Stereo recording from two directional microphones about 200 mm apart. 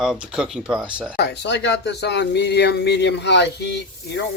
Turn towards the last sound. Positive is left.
turn(degrees=60)  # may be behind; listen again after turning